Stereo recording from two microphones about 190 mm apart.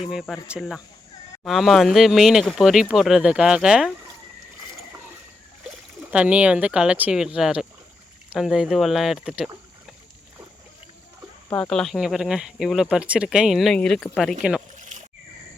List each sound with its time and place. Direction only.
0.1 s speech: centre (ahead or behind)
6.0 s speech: 10° right (ahead or behind)
11.5 s speech: 5° left (ahead or behind)
14.8 s a sound: 40° right (ahead or behind)